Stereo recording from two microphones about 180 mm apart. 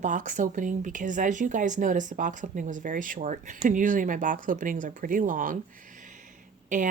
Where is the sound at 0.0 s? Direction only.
45° right (ahead or behind).